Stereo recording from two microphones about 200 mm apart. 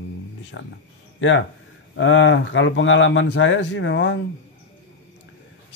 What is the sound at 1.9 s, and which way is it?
Speech, 70° left (ahead or behind).